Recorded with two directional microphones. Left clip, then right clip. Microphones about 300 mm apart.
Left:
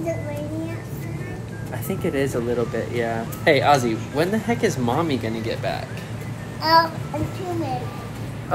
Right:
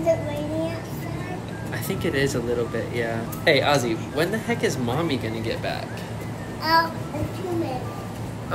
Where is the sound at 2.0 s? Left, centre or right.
Centre.